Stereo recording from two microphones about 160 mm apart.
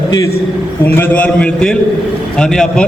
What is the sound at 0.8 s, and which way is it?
A man's voice, 10° left (ahead or behind).